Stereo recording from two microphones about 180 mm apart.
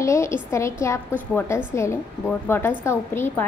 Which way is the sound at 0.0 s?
15° left (ahead or behind).